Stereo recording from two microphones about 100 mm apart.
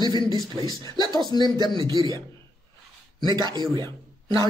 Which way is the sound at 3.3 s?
45° right (ahead or behind).